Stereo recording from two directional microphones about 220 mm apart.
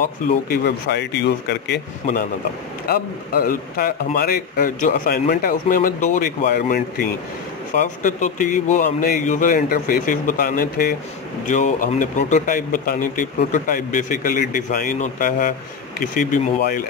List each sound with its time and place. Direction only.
0.5 s speech: 50° left (ahead or behind)
2.9 s speech: 40° left (ahead or behind)